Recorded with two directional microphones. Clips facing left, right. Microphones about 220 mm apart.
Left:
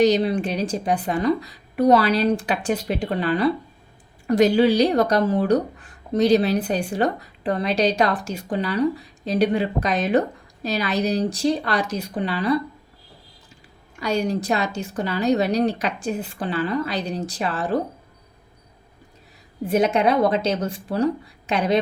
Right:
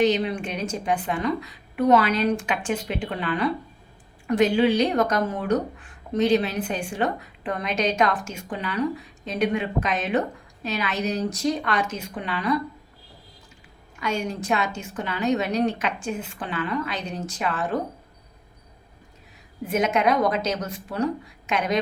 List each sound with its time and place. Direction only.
0.0 s speech: 40° left (ahead or behind)
14.0 s speech: 35° left (ahead or behind)
19.6 s speech: 35° left (ahead or behind)